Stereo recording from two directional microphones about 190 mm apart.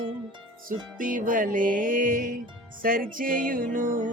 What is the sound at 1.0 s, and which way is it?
Music, 45° right (ahead or behind).